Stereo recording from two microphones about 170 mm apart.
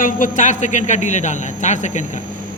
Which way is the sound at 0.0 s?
50° left (ahead or behind).